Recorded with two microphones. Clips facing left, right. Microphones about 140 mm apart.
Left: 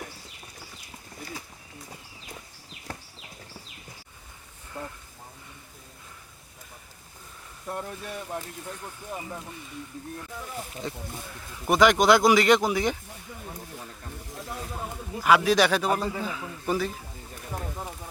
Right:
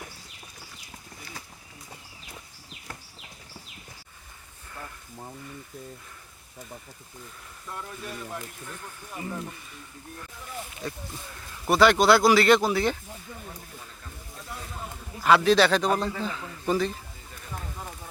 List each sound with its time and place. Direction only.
10.8 s a man's voice: 20° left (ahead or behind)
15.2 s a man's voice: 10° left (ahead or behind)
17.5 s a sound: 20° left (ahead or behind)